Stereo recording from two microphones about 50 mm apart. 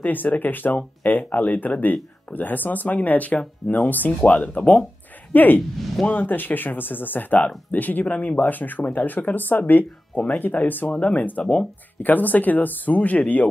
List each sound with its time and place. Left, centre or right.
0.0 s speech: left
10.9 s speech: left
11.1 s speech: left